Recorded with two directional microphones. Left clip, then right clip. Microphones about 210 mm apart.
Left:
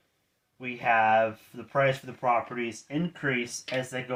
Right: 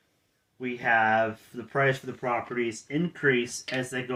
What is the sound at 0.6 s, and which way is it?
Speech, 25° left (ahead or behind).